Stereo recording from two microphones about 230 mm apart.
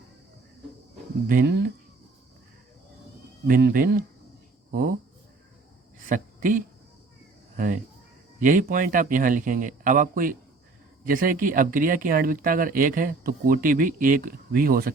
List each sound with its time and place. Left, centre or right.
1.3 s speech: right
3.4 s speech: right
6.1 s speech: right